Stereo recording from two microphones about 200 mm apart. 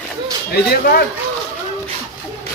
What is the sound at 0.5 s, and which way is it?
Speech, 50° left (ahead or behind).